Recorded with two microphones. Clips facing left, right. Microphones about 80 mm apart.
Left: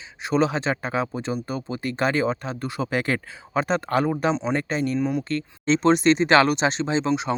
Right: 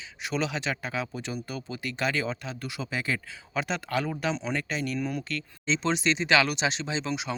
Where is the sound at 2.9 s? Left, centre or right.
Left.